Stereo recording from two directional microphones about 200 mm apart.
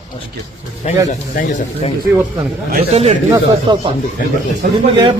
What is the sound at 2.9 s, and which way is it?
Speech, 30° right (ahead or behind).